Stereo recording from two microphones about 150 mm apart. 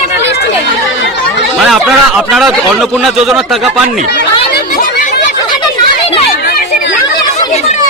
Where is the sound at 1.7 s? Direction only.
Centre (ahead or behind).